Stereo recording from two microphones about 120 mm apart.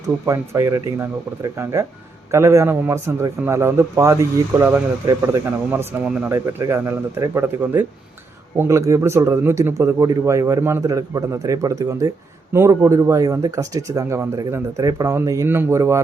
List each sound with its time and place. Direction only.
0.3 s a man's voice: 25° right (ahead or behind)
12.5 s a man's voice: 20° right (ahead or behind)